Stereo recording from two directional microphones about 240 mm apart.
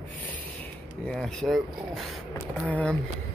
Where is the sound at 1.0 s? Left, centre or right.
Centre.